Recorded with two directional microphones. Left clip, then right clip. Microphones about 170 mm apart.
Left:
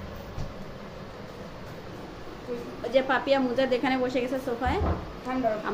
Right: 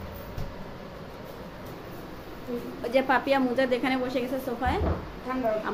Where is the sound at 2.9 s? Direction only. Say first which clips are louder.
Even; 15° right (ahead or behind).